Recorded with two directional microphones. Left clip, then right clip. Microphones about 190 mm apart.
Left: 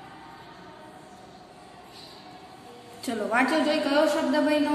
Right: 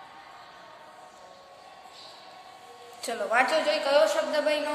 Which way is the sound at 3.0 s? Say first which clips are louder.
Even; 20° right (ahead or behind).